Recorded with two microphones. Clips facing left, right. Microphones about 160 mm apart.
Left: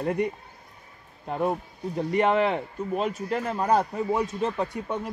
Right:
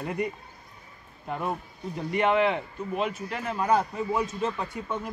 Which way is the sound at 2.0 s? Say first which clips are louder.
Left 1 dB; 35° left (ahead or behind).